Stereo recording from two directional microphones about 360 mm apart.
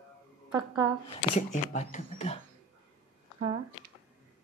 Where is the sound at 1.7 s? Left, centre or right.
Centre.